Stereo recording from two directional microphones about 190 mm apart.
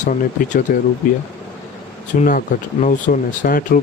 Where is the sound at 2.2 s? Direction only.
45° left (ahead or behind).